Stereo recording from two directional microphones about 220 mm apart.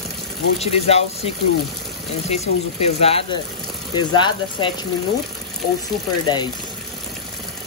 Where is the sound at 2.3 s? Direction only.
25° left (ahead or behind).